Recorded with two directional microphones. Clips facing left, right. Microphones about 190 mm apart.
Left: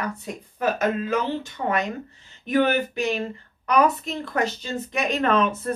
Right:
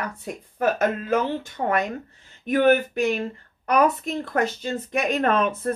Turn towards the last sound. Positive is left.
turn(degrees=-50)  # may be behind; listen again after turning